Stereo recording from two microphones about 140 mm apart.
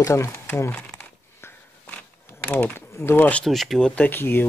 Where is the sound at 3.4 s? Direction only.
Centre (ahead or behind).